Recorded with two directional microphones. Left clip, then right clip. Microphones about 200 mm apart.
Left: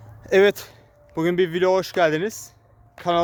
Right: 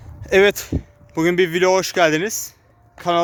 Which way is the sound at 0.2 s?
Centre (ahead or behind).